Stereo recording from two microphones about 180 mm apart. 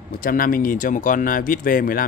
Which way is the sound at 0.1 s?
50° left (ahead or behind).